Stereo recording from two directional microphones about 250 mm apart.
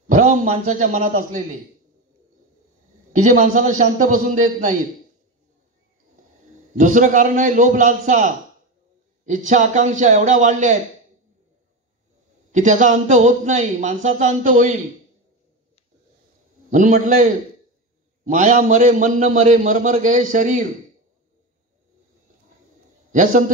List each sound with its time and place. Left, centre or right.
0.1 s a man's voice: right
3.1 s a man's voice: right
6.8 s a man's voice: right
12.5 s a man's voice: right
16.7 s a man's voice: right
23.1 s a man's voice: right